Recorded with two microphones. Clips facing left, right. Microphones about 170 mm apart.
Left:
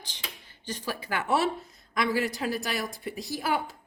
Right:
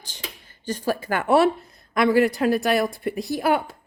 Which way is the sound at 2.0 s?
60° right (ahead or behind).